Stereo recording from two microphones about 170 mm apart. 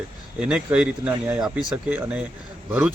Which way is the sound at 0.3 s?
5° right (ahead or behind).